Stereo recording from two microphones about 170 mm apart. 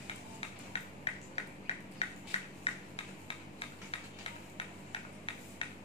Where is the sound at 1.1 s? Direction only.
35° left (ahead or behind).